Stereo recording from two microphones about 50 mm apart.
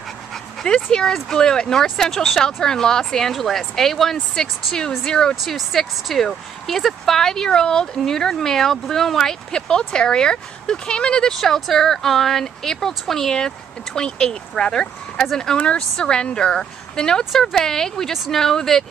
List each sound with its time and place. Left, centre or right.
0.7 s speech: centre
5.3 s speech: centre
17.3 s speech: centre
18.1 s speech: centre
18.4 s speech: centre